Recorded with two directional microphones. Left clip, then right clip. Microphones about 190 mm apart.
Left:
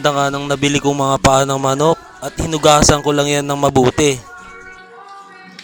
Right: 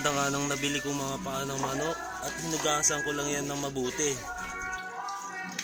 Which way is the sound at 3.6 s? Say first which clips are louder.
Left 19 dB; 55° left (ahead or behind).